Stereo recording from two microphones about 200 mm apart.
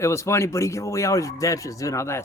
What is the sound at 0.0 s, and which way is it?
Speech, 15° left (ahead or behind).